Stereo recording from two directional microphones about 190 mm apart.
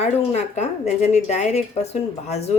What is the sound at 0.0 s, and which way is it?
Speech, 35° left (ahead or behind).